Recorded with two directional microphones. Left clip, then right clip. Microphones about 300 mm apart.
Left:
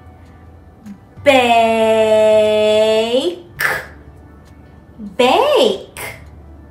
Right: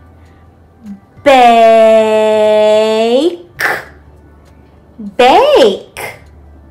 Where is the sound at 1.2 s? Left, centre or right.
Right.